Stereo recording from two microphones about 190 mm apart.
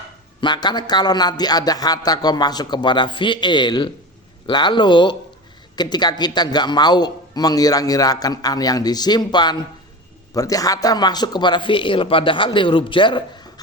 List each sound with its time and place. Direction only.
0.4 s a man's voice: 20° left (ahead or behind)